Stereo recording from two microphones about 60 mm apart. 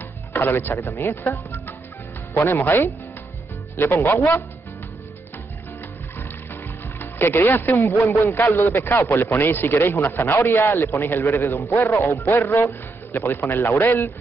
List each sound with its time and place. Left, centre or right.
0.3 s a man's voice: left
7.0 s speech: left
8.1 s speech: left
8.7 s a man's voice: left
12.2 s a man's voice: left
12.4 s speech: left
13.1 s a man's voice: left